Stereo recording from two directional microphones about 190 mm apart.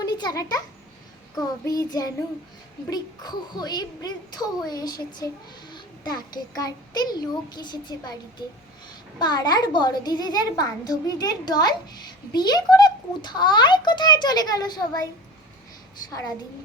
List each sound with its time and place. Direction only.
0.0 s a sound: 20° left (ahead or behind)
1.6 s a child's voice: 20° left (ahead or behind)
5.7 s child singing: 20° left (ahead or behind)
6.6 s a child's voice: 20° left (ahead or behind)
16.0 s a child's voice: 20° left (ahead or behind)